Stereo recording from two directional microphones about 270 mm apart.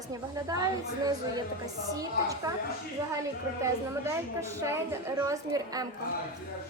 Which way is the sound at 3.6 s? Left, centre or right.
Centre.